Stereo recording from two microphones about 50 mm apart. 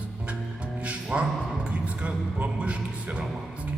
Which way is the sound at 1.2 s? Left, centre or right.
Right.